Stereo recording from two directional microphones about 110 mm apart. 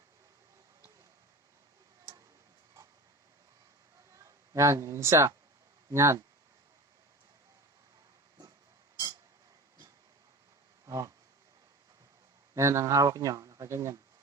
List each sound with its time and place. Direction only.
4.1 s speech: 30° right (ahead or behind)
10.8 s a sound: 30° right (ahead or behind)
12.5 s speech: 25° right (ahead or behind)